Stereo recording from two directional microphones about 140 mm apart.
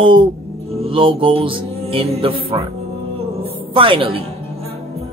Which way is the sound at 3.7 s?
40° right (ahead or behind).